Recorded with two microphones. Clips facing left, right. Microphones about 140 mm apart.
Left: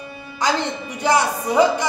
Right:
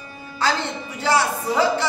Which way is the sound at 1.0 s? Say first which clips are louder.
Left 2 dB; 15° left (ahead or behind).